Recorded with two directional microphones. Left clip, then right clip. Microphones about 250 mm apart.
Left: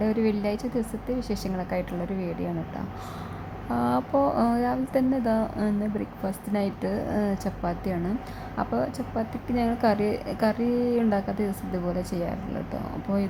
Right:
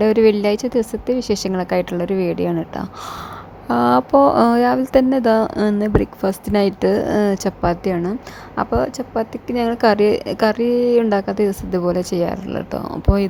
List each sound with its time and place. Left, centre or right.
0.0 s speech: right